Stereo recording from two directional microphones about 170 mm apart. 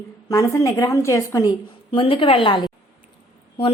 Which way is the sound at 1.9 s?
35° left (ahead or behind).